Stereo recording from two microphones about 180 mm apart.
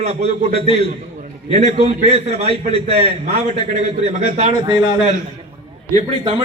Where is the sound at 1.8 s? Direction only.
35° right (ahead or behind).